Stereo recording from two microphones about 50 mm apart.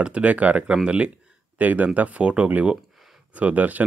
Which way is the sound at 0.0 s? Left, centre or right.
Right.